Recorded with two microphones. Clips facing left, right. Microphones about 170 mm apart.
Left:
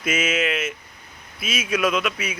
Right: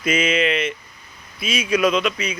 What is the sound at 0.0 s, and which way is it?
Speech, 5° left (ahead or behind).